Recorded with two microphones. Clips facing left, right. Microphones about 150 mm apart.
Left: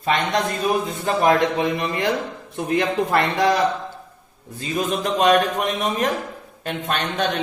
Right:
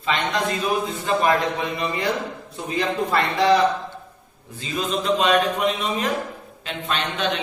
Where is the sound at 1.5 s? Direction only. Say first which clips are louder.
Left 3 dB; 55° left (ahead or behind).